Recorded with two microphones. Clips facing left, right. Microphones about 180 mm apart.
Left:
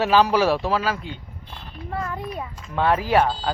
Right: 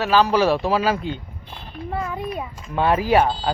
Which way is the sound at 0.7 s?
15° right (ahead or behind).